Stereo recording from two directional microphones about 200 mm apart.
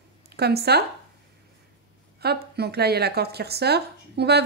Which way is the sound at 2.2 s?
55° right (ahead or behind).